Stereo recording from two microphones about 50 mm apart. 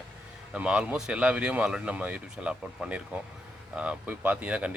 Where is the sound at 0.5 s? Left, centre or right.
Right.